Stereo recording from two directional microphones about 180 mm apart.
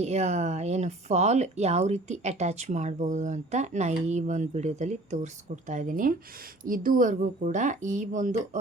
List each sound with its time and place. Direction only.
0.0 s speech: 35° right (ahead or behind)